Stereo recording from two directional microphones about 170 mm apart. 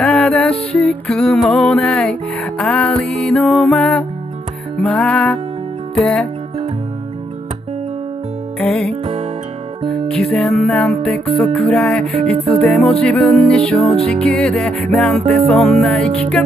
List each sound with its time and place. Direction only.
0.0 s music: 5° left (ahead or behind)
8.5 s music: 5° left (ahead or behind)
10.0 s music: 5° left (ahead or behind)